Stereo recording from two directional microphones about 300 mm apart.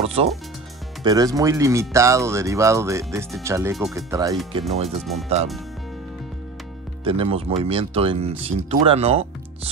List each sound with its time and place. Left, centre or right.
0.0 s speech: centre
4.8 s speech: centre
7.1 s speech: centre